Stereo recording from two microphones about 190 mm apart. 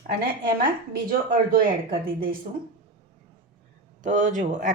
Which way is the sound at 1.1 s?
50° right (ahead or behind).